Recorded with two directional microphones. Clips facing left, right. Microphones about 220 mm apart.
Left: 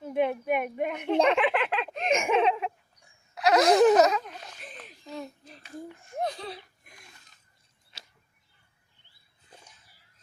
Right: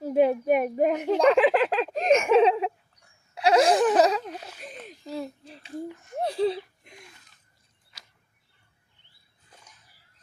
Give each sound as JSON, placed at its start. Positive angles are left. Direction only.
{"t": 0.0, "sound": "a child's voice", "side_deg": -35}
{"t": 2.0, "sound": "giggle", "side_deg": 10}
{"t": 2.3, "sound": "a sound", "side_deg": -35}
{"t": 6.1, "sound": "giggle", "side_deg": -30}